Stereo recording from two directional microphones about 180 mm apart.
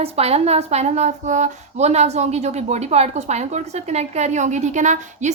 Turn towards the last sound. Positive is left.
turn(degrees=-40)  # may be behind; listen again after turning